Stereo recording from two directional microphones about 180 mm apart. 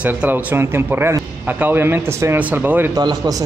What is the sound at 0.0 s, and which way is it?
A man's voice, 10° right (ahead or behind).